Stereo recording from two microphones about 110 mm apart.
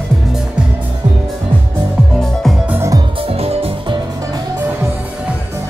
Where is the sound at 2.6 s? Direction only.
20° right (ahead or behind).